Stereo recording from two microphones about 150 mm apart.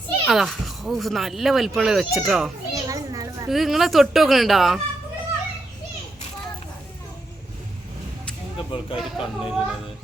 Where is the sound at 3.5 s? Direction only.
Centre (ahead or behind).